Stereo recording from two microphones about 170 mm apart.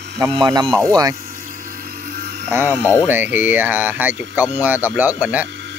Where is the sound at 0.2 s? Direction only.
20° right (ahead or behind).